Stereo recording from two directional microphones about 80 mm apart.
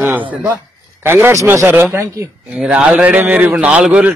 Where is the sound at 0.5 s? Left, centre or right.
Right.